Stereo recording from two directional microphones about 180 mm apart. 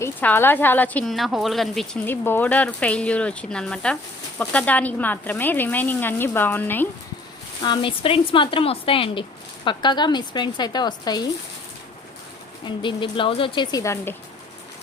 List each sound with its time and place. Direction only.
0.0 s speech: 10° left (ahead or behind)
7.6 s speech: 25° left (ahead or behind)
12.6 s speech: 25° left (ahead or behind)